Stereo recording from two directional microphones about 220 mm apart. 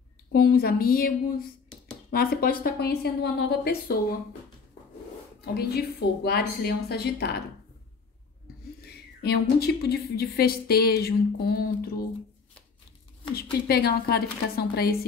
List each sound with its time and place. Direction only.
0.3 s a woman's voice: 40° left (ahead or behind)
2.1 s a woman's voice: 45° left (ahead or behind)
5.4 s a woman's voice: 45° left (ahead or behind)
8.8 s a woman's voice: 45° left (ahead or behind)
13.3 s a woman's voice: 45° left (ahead or behind)